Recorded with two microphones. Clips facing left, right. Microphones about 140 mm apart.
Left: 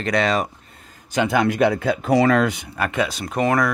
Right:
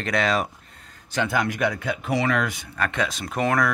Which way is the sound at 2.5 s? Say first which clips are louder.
Left 3 dB; 15° left (ahead or behind).